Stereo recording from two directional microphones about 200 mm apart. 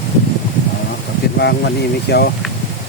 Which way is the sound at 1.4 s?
55° left (ahead or behind).